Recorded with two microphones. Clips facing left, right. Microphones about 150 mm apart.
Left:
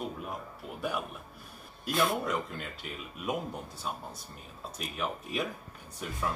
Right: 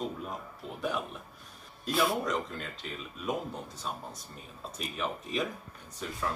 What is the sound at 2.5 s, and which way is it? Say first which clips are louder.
Speech: right 1 dB; 10° left (ahead or behind).